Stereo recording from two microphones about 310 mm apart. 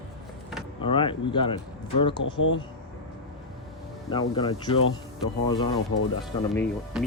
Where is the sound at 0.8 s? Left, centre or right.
Centre.